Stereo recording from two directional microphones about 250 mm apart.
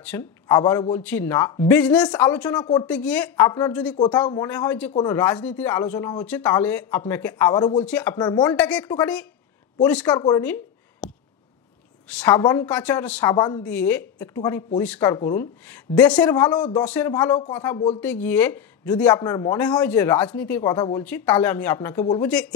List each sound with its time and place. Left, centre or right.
0.0 s a woman's voice: centre
2.5 s speech: centre
2.9 s a woman's voice: centre
3.9 s speech: centre
7.8 s a woman's voice: centre
8.2 s speech: centre
8.5 s a woman's voice: centre
10.1 s a sound: centre
12.1 s speech: centre
17.7 s speech: left
18.0 s speech: centre